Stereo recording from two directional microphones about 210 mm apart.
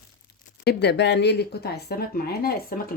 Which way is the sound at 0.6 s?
50° left (ahead or behind).